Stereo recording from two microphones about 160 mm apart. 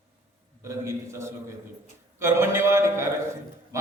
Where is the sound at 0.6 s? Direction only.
20° right (ahead or behind).